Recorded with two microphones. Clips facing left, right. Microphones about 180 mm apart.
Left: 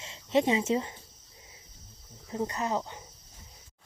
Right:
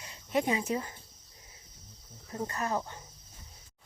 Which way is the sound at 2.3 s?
20° left (ahead or behind).